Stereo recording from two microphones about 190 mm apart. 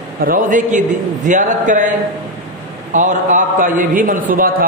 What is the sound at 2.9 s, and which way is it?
A man's voice, 40° right (ahead or behind).